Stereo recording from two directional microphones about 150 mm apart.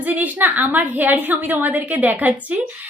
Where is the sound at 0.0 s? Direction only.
10° right (ahead or behind).